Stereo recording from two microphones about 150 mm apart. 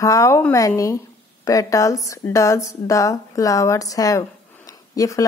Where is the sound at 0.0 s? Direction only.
20° left (ahead or behind).